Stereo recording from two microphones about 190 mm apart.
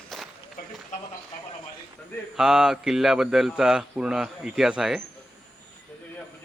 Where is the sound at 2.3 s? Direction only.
5° right (ahead or behind).